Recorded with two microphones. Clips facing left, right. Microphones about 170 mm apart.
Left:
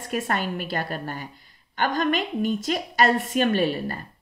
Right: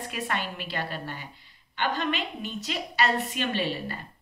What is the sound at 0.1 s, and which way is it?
A woman's voice, 45° left (ahead or behind).